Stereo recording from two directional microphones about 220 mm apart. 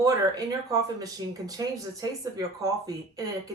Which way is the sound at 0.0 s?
15° right (ahead or behind).